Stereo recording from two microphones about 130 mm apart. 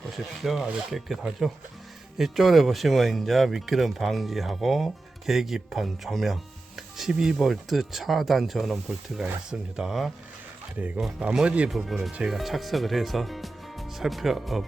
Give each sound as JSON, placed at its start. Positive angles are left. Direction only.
{"t": 0.2, "sound": "speech", "side_deg": 0}